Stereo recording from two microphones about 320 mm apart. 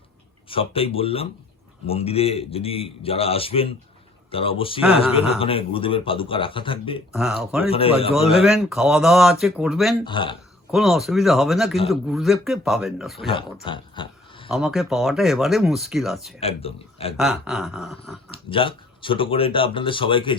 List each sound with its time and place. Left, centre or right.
0.4 s a man's voice: centre
7.1 s speech: centre
7.7 s a man's voice: centre
8.3 s speech: centre
10.0 s a man's voice: centre
10.7 s speech: centre
13.7 s a sound: centre
14.5 s speech: centre
16.4 s a man's voice: centre
17.2 s speech: centre
18.4 s a man's voice: centre